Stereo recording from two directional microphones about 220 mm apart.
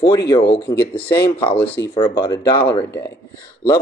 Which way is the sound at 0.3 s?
20° left (ahead or behind).